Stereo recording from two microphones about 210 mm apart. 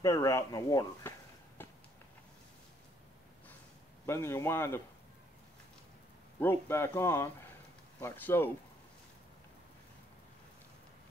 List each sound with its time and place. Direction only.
0.0 s speech: 15° left (ahead or behind)
1.6 s a sound: 10° left (ahead or behind)
4.0 s speech: 10° left (ahead or behind)
6.4 s speech: 10° left (ahead or behind)